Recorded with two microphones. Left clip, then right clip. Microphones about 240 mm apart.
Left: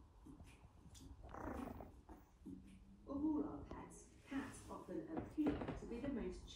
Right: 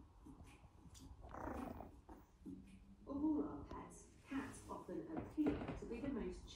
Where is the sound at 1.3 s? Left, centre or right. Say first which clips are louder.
Right 1 dB; centre.